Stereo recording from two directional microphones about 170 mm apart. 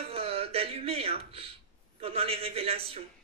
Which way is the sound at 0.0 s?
35° right (ahead or behind).